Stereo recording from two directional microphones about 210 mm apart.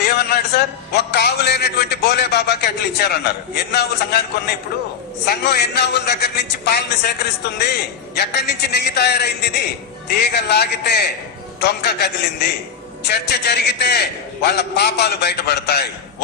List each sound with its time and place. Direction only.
0.0 s a man's voice: 50° left (ahead or behind)
10.3 s a man's voice: 50° left (ahead or behind)